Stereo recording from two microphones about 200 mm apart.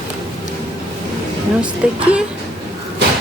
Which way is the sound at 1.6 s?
5° right (ahead or behind).